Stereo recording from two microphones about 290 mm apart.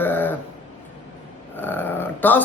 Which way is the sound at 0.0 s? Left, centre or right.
Centre.